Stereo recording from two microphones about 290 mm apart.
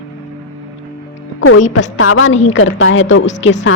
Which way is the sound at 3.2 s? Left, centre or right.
Left.